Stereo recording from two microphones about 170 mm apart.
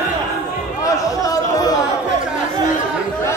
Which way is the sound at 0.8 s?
20° left (ahead or behind).